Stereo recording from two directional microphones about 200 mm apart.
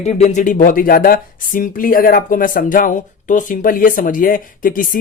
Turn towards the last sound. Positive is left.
turn(degrees=45)  # may be behind; listen again after turning